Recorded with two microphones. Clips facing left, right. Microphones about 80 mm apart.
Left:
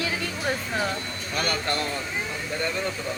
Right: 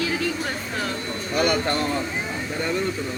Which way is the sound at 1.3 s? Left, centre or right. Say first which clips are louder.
Right 5 dB; centre.